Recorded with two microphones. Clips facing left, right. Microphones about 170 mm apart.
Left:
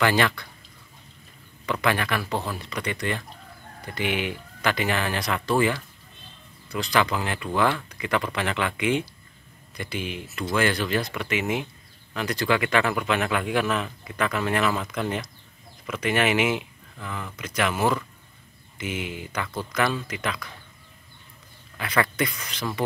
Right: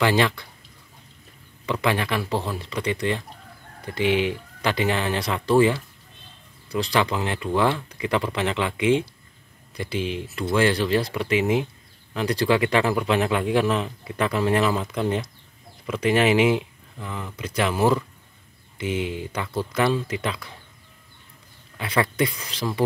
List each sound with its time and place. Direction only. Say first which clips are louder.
0.0 s a man's voice: right 2 dB; 25° right (ahead or behind)
1.7 s a man's voice: right 1 dB; 25° right (ahead or behind)
21.7 s a man's voice: right 2 dB; 25° right (ahead or behind)